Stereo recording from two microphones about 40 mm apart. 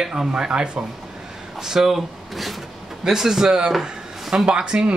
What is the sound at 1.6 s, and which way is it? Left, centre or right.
Speech, centre.